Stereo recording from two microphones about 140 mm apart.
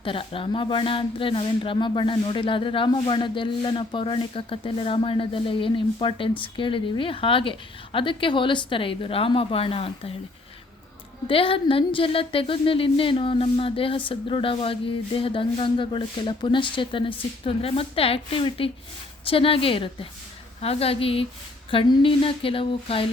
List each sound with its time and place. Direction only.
0.0 s speech: 40° left (ahead or behind)
11.3 s a woman's voice: 40° left (ahead or behind)